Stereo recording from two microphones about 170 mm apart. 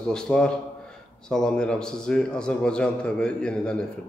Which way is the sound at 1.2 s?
5° left (ahead or behind).